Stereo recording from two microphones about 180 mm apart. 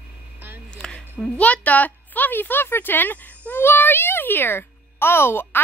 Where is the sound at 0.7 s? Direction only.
5° left (ahead or behind).